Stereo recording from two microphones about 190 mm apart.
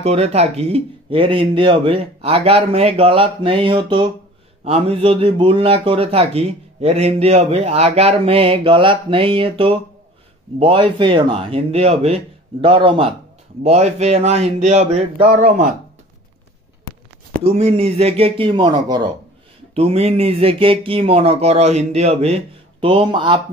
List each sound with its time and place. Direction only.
0.0 s a man's voice: 35° right (ahead or behind)
17.3 s a man's voice: 35° right (ahead or behind)